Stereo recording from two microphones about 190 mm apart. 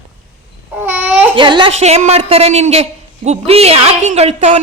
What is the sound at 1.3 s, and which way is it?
A woman's voice, 25° right (ahead or behind).